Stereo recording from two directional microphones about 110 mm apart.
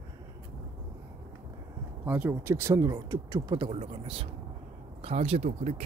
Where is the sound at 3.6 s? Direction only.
55° right (ahead or behind).